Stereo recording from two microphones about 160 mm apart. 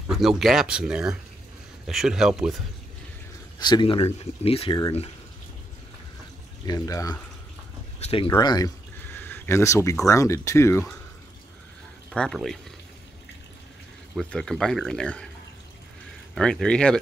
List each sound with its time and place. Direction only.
0.1 s speech: centre (ahead or behind)
3.5 s speech: 25° left (ahead or behind)
6.6 s speech: 25° left (ahead or behind)
8.0 s speech: 35° left (ahead or behind)
8.4 s speech: 25° left (ahead or behind)
9.0 s a sound: 15° left (ahead or behind)
10.0 s speech: 20° left (ahead or behind)
12.1 s speech: centre (ahead or behind)
14.1 s speech: 5° left (ahead or behind)
16.3 s speech: 5° left (ahead or behind)